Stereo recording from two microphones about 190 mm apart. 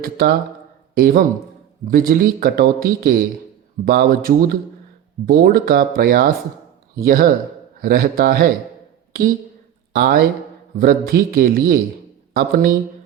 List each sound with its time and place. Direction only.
0.0 s speech: 55° right (ahead or behind)
9.9 s speech: 50° right (ahead or behind)